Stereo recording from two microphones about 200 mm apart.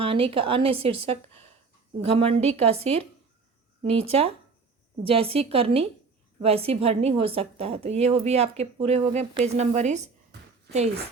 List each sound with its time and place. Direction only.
0.0 s a woman's voice: 25° right (ahead or behind)